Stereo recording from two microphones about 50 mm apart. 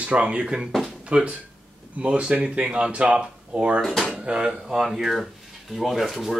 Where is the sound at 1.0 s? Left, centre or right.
Right.